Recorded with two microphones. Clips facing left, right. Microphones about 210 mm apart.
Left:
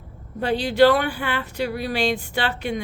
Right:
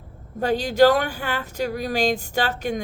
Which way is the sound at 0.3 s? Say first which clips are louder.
Even; 45° right (ahead or behind).